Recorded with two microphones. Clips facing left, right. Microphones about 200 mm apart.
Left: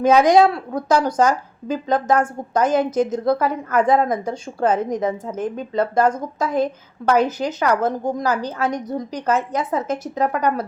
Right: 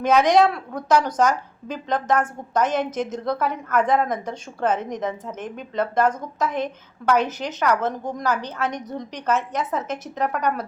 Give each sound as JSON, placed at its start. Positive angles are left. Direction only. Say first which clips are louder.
{"t": 0.0, "sound": "a woman's voice", "louder": "left 3 dB", "side_deg": 30}